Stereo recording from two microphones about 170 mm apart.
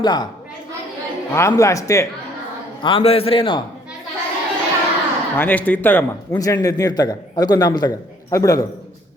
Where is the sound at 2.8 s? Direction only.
30° left (ahead or behind).